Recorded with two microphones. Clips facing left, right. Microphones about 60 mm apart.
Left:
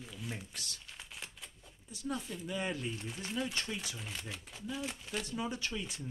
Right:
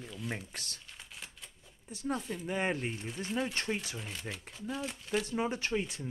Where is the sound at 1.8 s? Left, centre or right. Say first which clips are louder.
Right 4 dB; right.